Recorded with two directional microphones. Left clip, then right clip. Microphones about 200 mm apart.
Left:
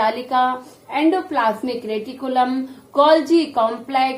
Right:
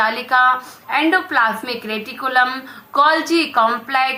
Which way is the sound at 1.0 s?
5° left (ahead or behind).